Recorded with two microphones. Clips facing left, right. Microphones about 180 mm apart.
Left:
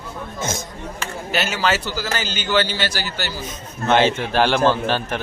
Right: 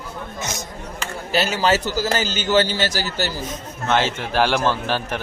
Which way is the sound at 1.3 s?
35° right (ahead or behind).